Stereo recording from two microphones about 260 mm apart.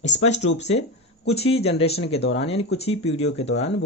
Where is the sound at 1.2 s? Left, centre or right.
Left.